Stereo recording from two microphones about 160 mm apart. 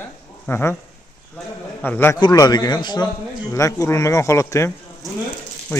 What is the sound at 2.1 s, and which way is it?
Speech, 25° left (ahead or behind).